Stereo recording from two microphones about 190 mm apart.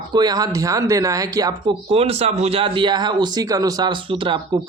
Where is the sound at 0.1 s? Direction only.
20° right (ahead or behind).